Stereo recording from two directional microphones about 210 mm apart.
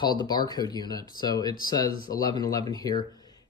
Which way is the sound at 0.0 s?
20° left (ahead or behind).